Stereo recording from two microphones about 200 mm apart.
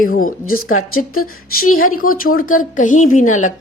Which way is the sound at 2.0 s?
45° left (ahead or behind).